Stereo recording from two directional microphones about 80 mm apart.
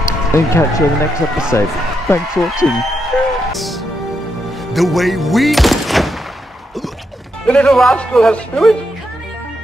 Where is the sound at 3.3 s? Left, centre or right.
Centre.